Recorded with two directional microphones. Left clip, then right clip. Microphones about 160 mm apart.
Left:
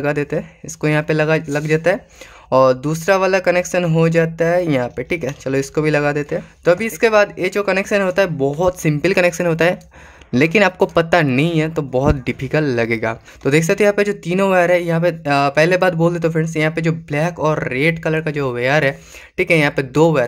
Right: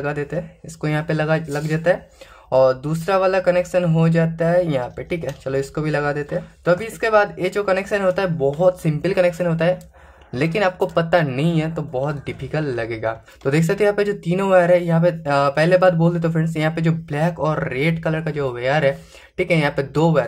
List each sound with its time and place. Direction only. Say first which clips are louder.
0.0 s speech: left 5 dB; 30° left (ahead or behind)
11.9 s speech: left 7 dB; 40° left (ahead or behind)